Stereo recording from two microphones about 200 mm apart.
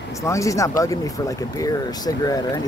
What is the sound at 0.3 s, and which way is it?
Speech, 15° left (ahead or behind).